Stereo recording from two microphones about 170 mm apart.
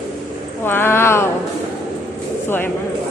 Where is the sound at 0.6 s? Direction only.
15° left (ahead or behind).